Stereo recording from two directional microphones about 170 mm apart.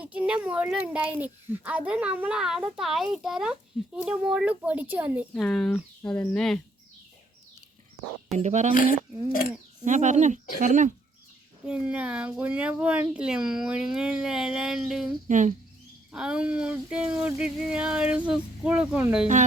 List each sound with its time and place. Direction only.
0.0 s a child's voice: 10° right (ahead or behind)
5.3 s speech: 5° left (ahead or behind)
8.3 s speech: 40° right (ahead or behind)
9.8 s speech: 45° right (ahead or behind)
11.6 s speech: 5° right (ahead or behind)
15.3 s speech: 45° right (ahead or behind)
16.1 s speech: 5° right (ahead or behind)